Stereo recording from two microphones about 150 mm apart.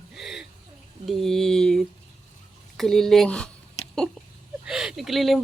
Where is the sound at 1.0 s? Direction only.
Centre (ahead or behind).